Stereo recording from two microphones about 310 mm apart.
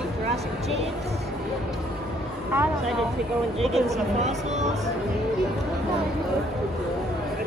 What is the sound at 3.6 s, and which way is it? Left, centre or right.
Speech, centre.